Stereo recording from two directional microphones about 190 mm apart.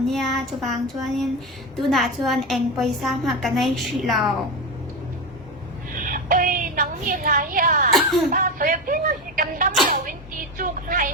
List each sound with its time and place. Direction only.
0.1 s a woman's voice: centre (ahead or behind)
6.0 s a sound: 45° right (ahead or behind)
8.3 s speech: 45° right (ahead or behind)